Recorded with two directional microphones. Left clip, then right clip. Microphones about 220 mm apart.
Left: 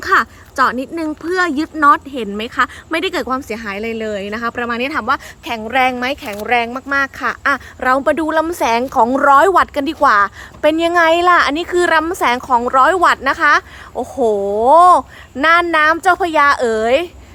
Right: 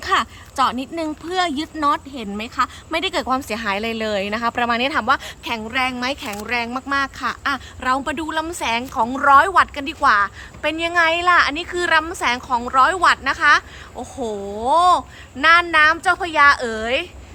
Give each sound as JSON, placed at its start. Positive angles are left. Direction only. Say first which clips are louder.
{"t": 0.0, "sound": "a sound", "louder": "left 6 dB", "side_deg": 5}
{"t": 0.9, "sound": "speech", "louder": "left 4 dB", "side_deg": 5}
{"t": 14.7, "sound": "speech", "louder": "left 6 dB", "side_deg": 25}